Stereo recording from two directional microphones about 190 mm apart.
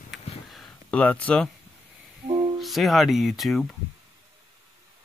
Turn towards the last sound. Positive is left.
turn(degrees=0)  # may be behind; listen again after turning